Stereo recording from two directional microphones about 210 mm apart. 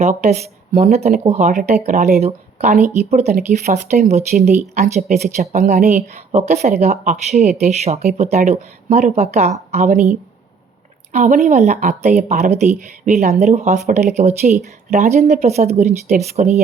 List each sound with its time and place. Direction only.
0.0 s speech: 35° right (ahead or behind)
11.1 s speech: 35° right (ahead or behind)